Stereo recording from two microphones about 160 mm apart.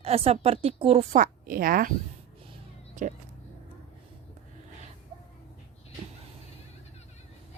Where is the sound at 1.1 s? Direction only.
55° right (ahead or behind).